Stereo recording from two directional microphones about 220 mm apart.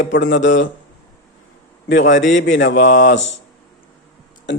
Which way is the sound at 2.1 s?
55° left (ahead or behind).